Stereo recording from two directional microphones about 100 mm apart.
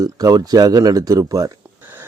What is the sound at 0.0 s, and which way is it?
Speech, 35° right (ahead or behind).